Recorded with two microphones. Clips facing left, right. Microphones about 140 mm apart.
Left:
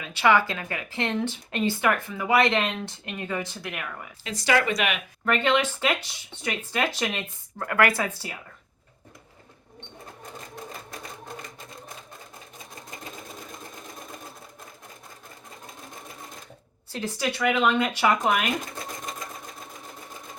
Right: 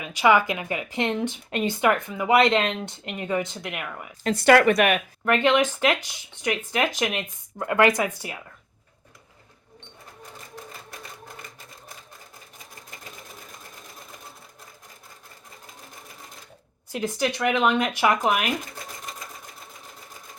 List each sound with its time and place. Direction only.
0.0 s speech: 15° right (ahead or behind)
4.2 s speech: 60° right (ahead or behind)
5.2 s speech: 15° right (ahead or behind)
16.9 s speech: 15° right (ahead or behind)